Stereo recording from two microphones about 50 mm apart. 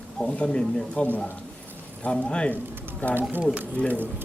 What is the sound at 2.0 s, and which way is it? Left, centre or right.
Speech, left.